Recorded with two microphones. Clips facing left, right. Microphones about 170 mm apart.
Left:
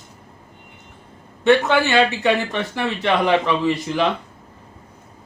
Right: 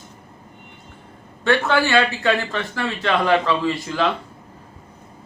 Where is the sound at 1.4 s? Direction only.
20° left (ahead or behind).